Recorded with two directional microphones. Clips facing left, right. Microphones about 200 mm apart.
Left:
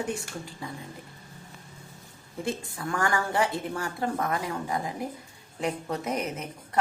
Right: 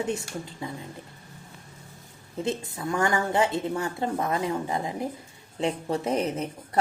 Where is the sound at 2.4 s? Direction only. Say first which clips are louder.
Right 3 dB; 20° right (ahead or behind).